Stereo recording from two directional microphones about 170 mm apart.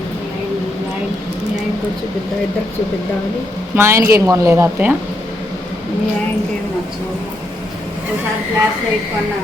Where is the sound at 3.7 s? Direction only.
15° right (ahead or behind).